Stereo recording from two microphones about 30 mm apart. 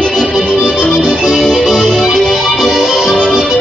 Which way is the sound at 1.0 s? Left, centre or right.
Right.